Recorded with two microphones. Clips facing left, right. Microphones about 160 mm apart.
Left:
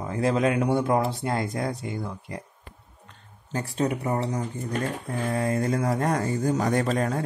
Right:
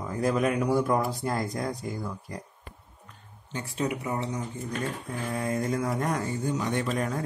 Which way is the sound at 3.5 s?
35° left (ahead or behind).